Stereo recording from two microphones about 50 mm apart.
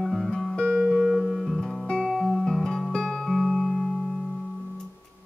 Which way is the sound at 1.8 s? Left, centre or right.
Centre.